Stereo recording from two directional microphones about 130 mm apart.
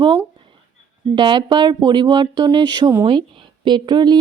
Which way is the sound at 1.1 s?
35° right (ahead or behind).